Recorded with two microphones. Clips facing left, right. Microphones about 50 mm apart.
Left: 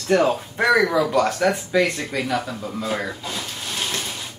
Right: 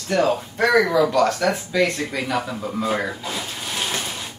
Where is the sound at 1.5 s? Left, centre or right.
Centre.